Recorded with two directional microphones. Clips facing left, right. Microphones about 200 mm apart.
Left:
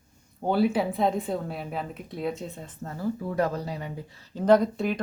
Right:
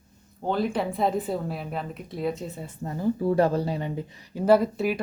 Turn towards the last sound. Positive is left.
turn(degrees=-5)  # may be behind; listen again after turning